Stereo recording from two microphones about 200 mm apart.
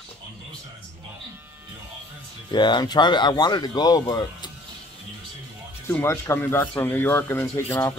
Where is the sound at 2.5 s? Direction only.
20° left (ahead or behind).